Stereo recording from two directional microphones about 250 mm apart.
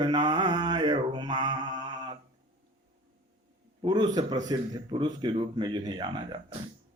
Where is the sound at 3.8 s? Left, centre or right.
Centre.